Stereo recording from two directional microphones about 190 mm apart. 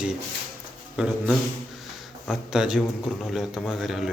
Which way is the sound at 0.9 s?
5° right (ahead or behind).